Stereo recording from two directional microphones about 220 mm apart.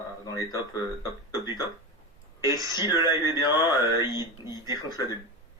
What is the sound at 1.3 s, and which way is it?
Speech, 20° left (ahead or behind).